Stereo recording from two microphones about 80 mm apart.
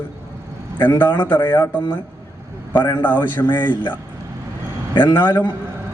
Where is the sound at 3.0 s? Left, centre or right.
Left.